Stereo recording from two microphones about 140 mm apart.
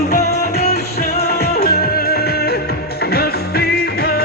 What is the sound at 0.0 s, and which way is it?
Music, 90° left.